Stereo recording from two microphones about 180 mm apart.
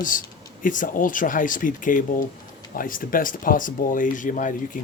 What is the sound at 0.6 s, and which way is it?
Speech, 45° left (ahead or behind).